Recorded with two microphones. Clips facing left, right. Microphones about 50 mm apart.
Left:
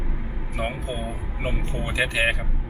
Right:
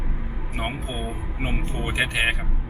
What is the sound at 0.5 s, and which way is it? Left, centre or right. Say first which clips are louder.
Speech: left 1 dB; right.